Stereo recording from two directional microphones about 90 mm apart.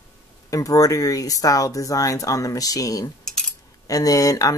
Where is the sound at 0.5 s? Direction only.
40° left (ahead or behind).